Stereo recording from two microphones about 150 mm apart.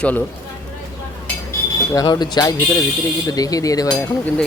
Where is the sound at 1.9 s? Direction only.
25° left (ahead or behind).